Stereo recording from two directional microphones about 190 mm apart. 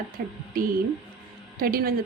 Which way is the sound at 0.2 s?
50° right (ahead or behind).